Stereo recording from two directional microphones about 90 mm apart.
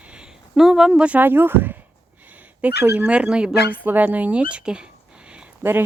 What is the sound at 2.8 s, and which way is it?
Speech, 15° right (ahead or behind).